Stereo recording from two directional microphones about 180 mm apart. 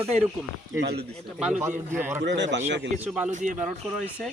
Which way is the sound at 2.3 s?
80° right.